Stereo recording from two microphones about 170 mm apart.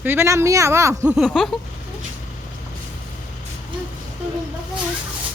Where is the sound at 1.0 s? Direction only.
Centre (ahead or behind).